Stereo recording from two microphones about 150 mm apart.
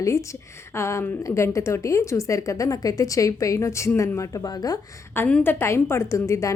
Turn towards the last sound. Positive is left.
turn(degrees=20)  # may be behind; listen again after turning